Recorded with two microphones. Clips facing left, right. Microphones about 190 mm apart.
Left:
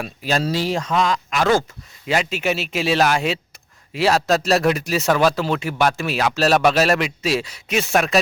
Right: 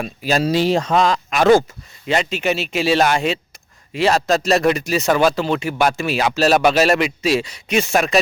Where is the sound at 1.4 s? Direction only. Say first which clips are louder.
Right 6 dB; 15° right (ahead or behind).